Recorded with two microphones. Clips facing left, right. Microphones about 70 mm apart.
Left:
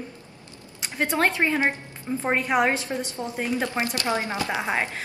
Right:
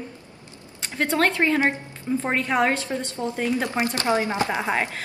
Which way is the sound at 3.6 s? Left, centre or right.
Right.